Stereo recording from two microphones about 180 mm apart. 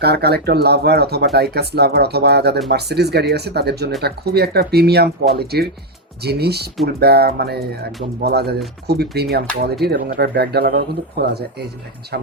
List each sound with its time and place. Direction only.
0.0 s speech: 65° right (ahead or behind)